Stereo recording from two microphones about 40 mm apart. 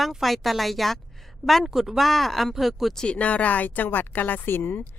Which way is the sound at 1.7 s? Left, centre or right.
Centre.